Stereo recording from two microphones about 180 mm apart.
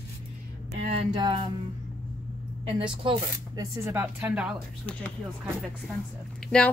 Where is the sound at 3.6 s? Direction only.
10° right (ahead or behind).